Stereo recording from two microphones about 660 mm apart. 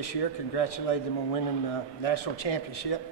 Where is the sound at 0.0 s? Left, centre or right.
Left.